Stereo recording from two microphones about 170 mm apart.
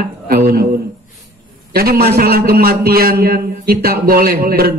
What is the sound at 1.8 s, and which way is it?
A man's voice, 65° right (ahead or behind).